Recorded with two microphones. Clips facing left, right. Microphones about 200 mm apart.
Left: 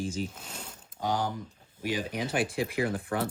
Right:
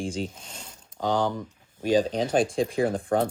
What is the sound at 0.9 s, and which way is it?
Speech, 75° right (ahead or behind).